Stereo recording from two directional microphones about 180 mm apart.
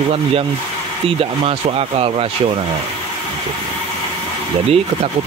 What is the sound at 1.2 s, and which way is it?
Speech, 30° right (ahead or behind).